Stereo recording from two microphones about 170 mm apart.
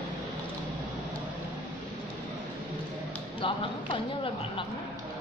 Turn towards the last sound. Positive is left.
turn(degrees=30)  # may be behind; listen again after turning